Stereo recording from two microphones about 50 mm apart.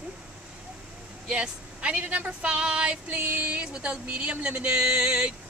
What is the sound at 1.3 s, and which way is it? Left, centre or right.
Speech, right.